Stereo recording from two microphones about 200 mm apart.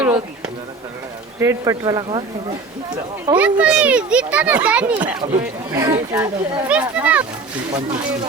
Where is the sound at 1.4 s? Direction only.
15° right (ahead or behind).